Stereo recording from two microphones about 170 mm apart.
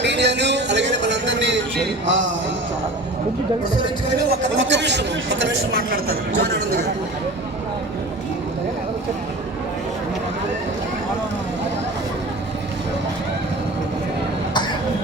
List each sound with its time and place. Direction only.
0.0 s a sound: 90° right
4.3 s speech: 90° right
5.9 s speech: 65° right (ahead or behind)